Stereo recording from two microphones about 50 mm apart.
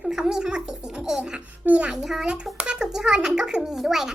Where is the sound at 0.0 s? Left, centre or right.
Centre.